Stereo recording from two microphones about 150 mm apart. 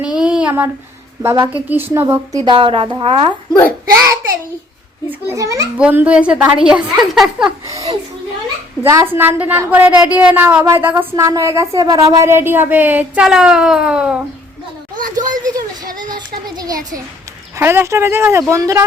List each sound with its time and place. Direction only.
0.0 s child singing: 5° right (ahead or behind)
1.2 s speech: 20° right (ahead or behind)
2.4 s a woman's voice: 35° right (ahead or behind)
5.0 s a child's voice: 20° right (ahead or behind)
5.7 s speech: 10° right (ahead or behind)
7.7 s a child's voice: 20° right (ahead or behind); by 14.2 s 5° right (ahead or behind)
14.9 s a sound: 65° right (ahead or behind)
15.3 s a sound: 25° right (ahead or behind)
17.6 s speech: 15° right (ahead or behind)